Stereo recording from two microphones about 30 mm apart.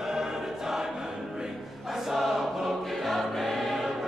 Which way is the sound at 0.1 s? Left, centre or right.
Centre.